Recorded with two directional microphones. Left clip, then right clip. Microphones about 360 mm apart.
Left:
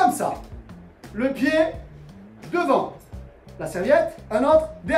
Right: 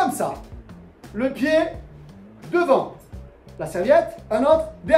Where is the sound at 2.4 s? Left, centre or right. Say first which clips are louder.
Right 3 dB; centre.